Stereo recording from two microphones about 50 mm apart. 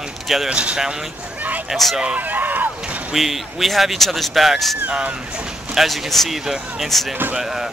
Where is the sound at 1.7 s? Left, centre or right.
Centre.